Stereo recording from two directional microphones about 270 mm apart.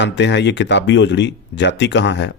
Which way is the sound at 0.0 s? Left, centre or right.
Left.